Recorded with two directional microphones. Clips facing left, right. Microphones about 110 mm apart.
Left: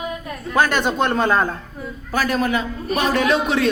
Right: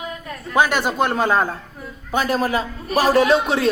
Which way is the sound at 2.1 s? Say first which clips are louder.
Even; 30° right (ahead or behind).